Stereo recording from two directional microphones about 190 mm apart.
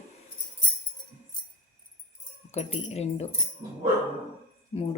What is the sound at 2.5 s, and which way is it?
Speech, 35° left (ahead or behind).